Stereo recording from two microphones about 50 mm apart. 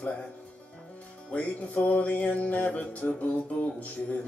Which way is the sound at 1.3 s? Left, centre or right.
Left.